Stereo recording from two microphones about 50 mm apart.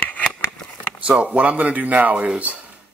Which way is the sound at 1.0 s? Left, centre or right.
Right.